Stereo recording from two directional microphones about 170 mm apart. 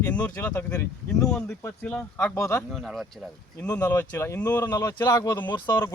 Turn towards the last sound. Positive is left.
turn(degrees=25)  # may be behind; listen again after turning